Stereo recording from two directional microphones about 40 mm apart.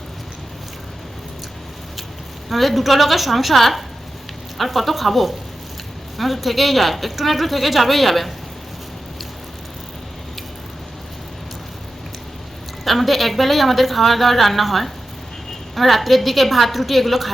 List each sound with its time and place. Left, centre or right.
2.5 s a woman's voice: centre
12.8 s a woman's voice: centre